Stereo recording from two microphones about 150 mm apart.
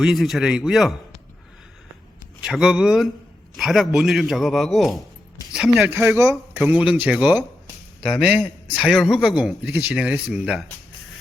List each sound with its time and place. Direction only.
0.0 s speech: centre (ahead or behind)
2.4 s speech: 5° right (ahead or behind)
5.8 s speech: 15° right (ahead or behind)